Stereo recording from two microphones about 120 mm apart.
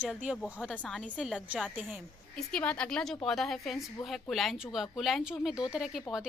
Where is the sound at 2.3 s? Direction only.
5° left (ahead or behind).